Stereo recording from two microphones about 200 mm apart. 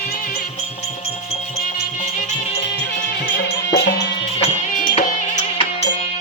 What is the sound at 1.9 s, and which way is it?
Music, 40° left (ahead or behind).